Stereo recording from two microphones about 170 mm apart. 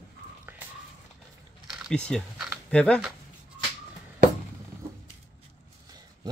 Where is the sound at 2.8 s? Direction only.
5° left (ahead or behind).